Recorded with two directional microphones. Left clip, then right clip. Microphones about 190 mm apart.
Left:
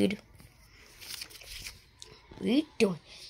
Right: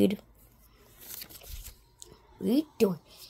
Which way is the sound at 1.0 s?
55° right (ahead or behind).